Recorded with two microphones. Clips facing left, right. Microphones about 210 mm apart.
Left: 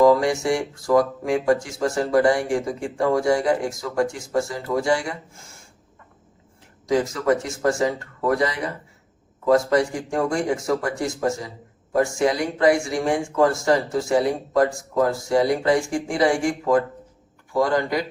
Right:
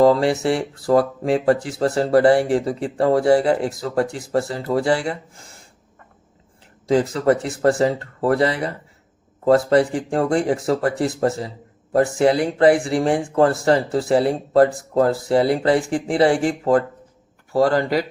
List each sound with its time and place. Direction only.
0.0 s speech: 30° right (ahead or behind)
6.9 s speech: 35° right (ahead or behind)